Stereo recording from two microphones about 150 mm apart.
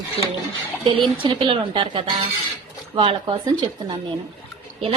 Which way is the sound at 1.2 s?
35° right (ahead or behind).